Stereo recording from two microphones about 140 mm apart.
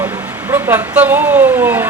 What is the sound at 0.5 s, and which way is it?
Speech, 15° right (ahead or behind).